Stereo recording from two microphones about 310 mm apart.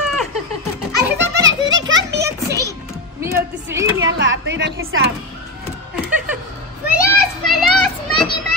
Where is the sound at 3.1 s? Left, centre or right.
Centre.